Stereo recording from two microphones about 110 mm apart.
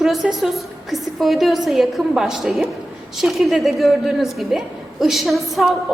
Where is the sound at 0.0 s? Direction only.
5° right (ahead or behind).